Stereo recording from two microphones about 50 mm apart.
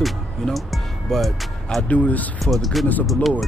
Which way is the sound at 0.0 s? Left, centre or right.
Centre.